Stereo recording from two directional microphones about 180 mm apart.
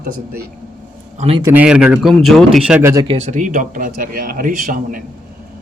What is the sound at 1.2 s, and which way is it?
Speech, 35° right (ahead or behind).